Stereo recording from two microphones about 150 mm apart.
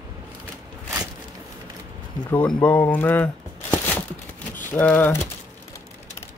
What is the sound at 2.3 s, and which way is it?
Speech, 10° left (ahead or behind).